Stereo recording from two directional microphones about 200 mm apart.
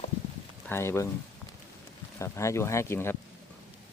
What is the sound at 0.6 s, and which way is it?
Speech, 10° left (ahead or behind).